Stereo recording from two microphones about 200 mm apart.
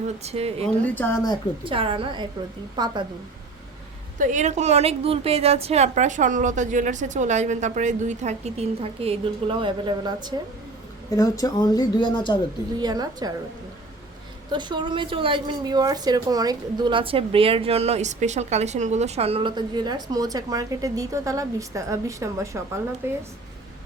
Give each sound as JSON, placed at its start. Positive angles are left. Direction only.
{"t": 0.2, "sound": "a woman's voice", "side_deg": -30}
{"t": 0.9, "sound": "speech", "side_deg": 10}
{"t": 1.6, "sound": "a woman's voice", "side_deg": -25}
{"t": 4.2, "sound": "a woman's voice", "side_deg": -40}
{"t": 11.1, "sound": "speech", "side_deg": 15}
{"t": 12.8, "sound": "a woman's voice", "side_deg": -20}
{"t": 14.5, "sound": "a woman's voice", "side_deg": -20}